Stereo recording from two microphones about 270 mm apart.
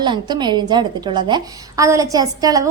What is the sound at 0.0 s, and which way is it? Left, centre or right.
A woman's voice, centre.